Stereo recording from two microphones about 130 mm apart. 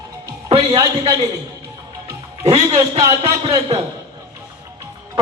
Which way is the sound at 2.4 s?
55° right (ahead or behind).